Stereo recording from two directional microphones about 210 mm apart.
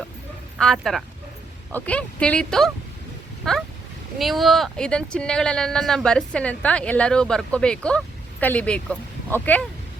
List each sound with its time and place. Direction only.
0.6 s speech: centre (ahead or behind)
4.2 s speech: centre (ahead or behind)